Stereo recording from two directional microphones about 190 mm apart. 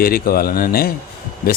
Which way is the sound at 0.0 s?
50° left (ahead or behind).